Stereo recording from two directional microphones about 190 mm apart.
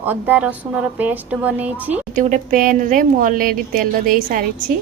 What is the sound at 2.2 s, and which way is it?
A woman's voice, 40° right (ahead or behind).